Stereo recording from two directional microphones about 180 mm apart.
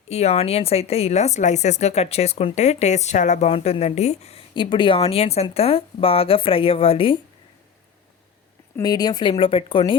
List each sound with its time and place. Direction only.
0.1 s a woman's voice: 35° left (ahead or behind)
8.8 s speech: 20° left (ahead or behind)